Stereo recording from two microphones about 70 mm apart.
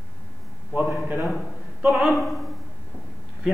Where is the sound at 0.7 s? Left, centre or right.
Right.